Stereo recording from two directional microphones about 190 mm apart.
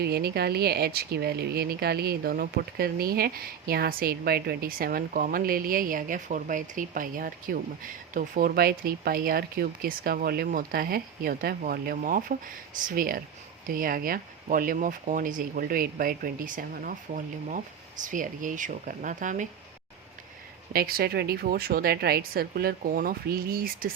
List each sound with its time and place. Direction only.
0.0 s speech: 55° right (ahead or behind)
20.7 s speech: 50° right (ahead or behind)